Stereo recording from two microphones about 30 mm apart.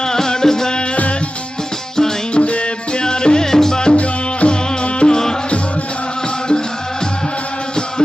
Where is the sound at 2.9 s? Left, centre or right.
Left.